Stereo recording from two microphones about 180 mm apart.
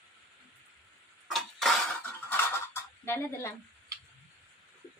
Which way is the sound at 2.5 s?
15° left (ahead or behind).